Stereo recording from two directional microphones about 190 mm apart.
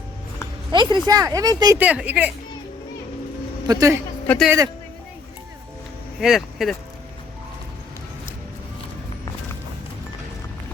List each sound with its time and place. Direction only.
0.7 s speech: 25° right (ahead or behind)
1.8 s speech: 5° right (ahead or behind)
3.7 s speech: 15° right (ahead or behind)
6.1 s speech: centre (ahead or behind)